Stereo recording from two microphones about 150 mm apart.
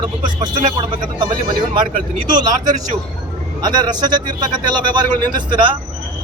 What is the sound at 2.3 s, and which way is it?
Speech, 25° right (ahead or behind).